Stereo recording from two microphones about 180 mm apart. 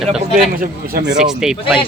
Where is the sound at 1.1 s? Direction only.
5° right (ahead or behind).